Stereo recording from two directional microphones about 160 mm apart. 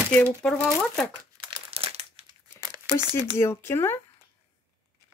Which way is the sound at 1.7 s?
35° right (ahead or behind).